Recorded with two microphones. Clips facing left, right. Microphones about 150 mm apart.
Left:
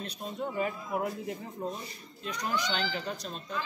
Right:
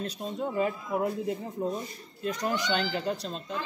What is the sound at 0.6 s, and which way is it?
Speech, 30° right (ahead or behind).